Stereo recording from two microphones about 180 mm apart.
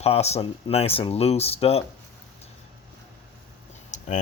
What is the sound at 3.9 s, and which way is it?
Typing, 45° left (ahead or behind).